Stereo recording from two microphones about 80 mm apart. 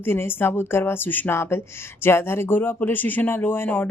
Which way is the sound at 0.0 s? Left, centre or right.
Left.